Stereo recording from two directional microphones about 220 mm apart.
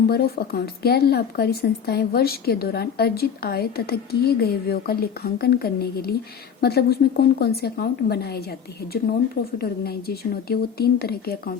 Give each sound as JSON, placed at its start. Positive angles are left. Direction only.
{"t": 0.1, "sound": "speech", "side_deg": 45}